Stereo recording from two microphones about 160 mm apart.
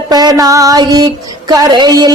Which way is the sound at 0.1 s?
25° right (ahead or behind).